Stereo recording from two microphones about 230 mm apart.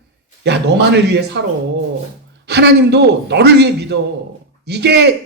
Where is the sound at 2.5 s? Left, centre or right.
Right.